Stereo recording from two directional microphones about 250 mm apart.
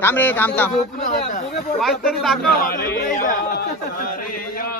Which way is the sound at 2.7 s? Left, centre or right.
Left.